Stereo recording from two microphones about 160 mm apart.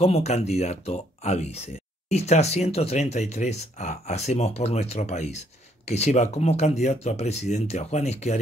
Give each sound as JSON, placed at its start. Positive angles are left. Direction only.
{"t": 0.0, "sound": "speech", "side_deg": 40}